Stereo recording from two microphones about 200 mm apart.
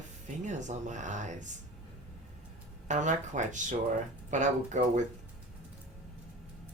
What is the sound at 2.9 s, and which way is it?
Speech, 35° right (ahead or behind).